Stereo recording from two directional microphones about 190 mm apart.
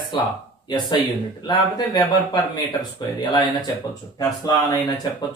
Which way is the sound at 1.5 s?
20° left (ahead or behind).